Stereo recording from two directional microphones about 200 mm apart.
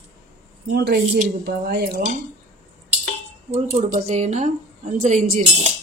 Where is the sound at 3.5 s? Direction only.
35° right (ahead or behind).